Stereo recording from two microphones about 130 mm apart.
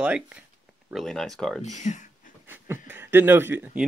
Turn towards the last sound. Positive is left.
turn(degrees=-15)  # may be behind; listen again after turning